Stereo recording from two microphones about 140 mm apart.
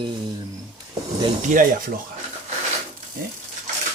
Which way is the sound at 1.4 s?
75° right (ahead or behind).